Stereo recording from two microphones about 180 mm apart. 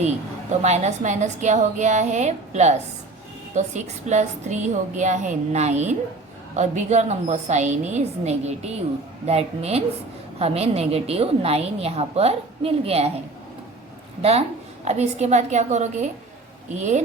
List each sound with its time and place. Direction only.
0.6 s a woman's voice: 40° right (ahead or behind)
14.2 s a woman's voice: 35° right (ahead or behind)